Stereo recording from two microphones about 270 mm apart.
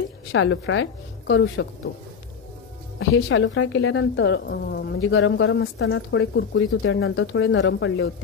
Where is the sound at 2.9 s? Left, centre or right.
Left.